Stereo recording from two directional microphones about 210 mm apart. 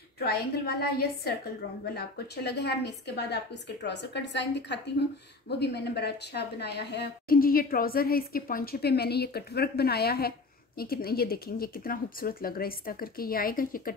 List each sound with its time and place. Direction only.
0.2 s a woman's voice: 50° left (ahead or behind)